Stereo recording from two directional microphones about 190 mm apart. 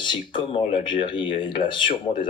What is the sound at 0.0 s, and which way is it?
Speech, 25° left (ahead or behind).